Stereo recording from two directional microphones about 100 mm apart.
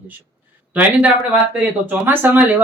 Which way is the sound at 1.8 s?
20° right (ahead or behind).